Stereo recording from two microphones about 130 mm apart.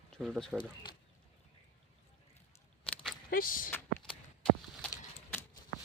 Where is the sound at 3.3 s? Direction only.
90° left.